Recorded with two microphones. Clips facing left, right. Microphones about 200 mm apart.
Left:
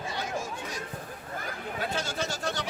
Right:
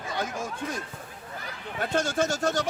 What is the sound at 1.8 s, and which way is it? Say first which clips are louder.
Speech: right 7 dB; 50° right (ahead or behind).